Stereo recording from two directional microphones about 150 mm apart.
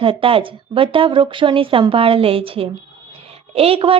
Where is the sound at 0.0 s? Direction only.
35° right (ahead or behind).